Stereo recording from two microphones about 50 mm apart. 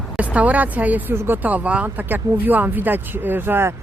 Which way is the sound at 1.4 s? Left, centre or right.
Right.